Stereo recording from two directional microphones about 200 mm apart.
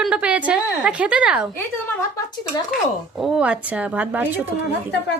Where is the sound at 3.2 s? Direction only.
Centre (ahead or behind).